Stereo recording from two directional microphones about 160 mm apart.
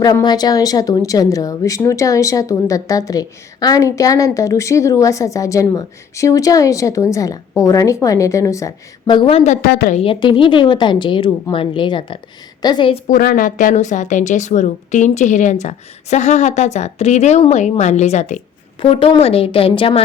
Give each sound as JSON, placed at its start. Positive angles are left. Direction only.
{"t": 0.0, "sound": "a woman's voice", "side_deg": 25}
{"t": 9.6, "sound": "a woman's voice", "side_deg": 80}
{"t": 9.9, "sound": "a woman's voice", "side_deg": 35}
{"t": 13.1, "sound": "speech", "side_deg": 60}
{"t": 18.8, "sound": "a woman's voice", "side_deg": 35}